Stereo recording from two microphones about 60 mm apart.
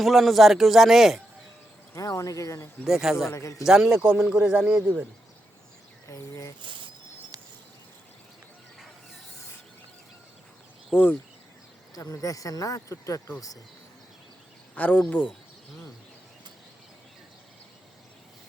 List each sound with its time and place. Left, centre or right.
0.0 s speech: centre
1.9 s speech: left
2.8 s speech: centre
3.3 s a man's voice: left
3.7 s a man's voice: centre
4.2 s speech: right
4.4 s speech: centre
6.1 s a sound: left
10.9 s speech: left
11.9 s speech: left
14.8 s speech: left